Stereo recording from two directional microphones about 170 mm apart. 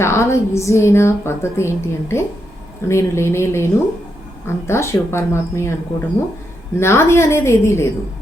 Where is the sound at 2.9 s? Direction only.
15° left (ahead or behind).